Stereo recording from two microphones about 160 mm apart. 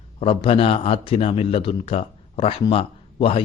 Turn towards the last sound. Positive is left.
turn(degrees=40)  # may be behind; listen again after turning